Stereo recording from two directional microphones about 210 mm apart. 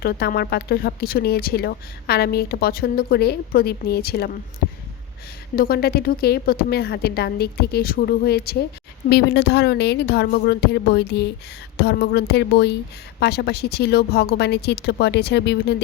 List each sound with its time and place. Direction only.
0.0 s speech: 50° left (ahead or behind)
5.5 s speech: 45° left (ahead or behind)